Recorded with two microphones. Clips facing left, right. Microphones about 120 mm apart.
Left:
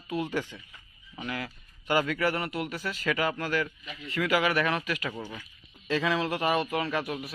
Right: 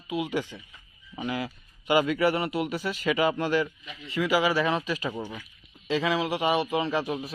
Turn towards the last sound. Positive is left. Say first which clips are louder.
# right 3 dB
turn(degrees=-25)  # may be behind; listen again after turning